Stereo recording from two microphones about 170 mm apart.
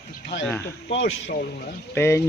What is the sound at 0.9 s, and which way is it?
Speech, 80° left.